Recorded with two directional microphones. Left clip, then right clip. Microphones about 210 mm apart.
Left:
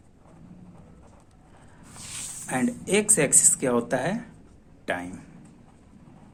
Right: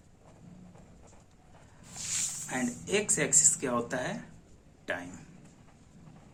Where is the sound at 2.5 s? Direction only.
50° left (ahead or behind).